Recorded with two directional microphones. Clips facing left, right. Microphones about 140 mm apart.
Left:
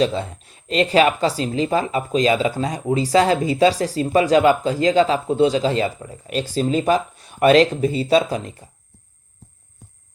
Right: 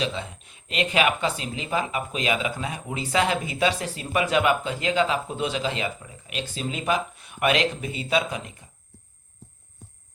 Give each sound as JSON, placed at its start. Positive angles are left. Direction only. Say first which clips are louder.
{"t": 0.0, "sound": "speech", "louder": "left 9 dB", "side_deg": 40}